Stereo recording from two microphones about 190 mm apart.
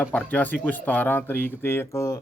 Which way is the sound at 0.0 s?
10° left (ahead or behind).